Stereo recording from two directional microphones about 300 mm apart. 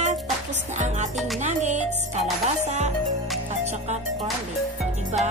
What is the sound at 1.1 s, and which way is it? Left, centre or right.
Music, centre.